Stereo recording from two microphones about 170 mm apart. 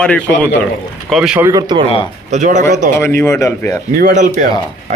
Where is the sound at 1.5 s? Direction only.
25° right (ahead or behind).